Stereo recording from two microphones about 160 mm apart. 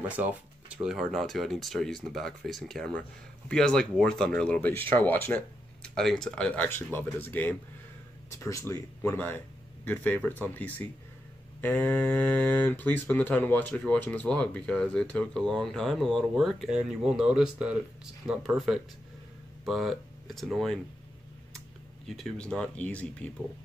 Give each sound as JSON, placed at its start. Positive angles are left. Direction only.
{"t": 0.0, "sound": "speech", "side_deg": -10}
{"t": 22.0, "sound": "speech", "side_deg": 0}